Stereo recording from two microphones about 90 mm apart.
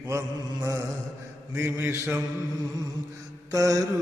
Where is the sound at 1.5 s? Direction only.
25° right (ahead or behind).